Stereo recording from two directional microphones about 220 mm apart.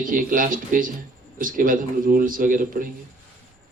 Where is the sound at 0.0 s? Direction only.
40° right (ahead or behind).